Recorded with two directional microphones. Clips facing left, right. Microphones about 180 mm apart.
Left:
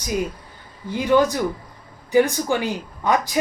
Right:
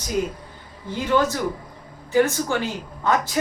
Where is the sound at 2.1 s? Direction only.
15° left (ahead or behind).